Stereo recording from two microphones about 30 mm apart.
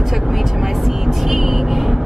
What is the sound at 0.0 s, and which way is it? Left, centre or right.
Vehicle, centre.